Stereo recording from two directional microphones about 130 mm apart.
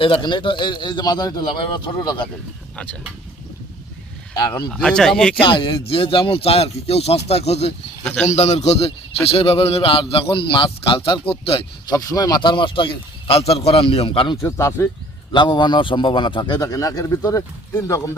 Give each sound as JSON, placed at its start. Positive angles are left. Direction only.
{"t": 0.0, "sound": "a man's voice", "side_deg": 35}
{"t": 2.7, "sound": "speech", "side_deg": 10}
{"t": 4.4, "sound": "a man's voice", "side_deg": 35}
{"t": 4.7, "sound": "speech", "side_deg": 5}
{"t": 5.4, "sound": "a man's voice", "side_deg": 40}
{"t": 8.0, "sound": "a man's voice", "side_deg": 10}
{"t": 8.3, "sound": "a man's voice", "side_deg": 60}
{"t": 11.9, "sound": "a man's voice", "side_deg": 25}
{"t": 14.4, "sound": "speech", "side_deg": 20}
{"t": 15.3, "sound": "a man's voice", "side_deg": 35}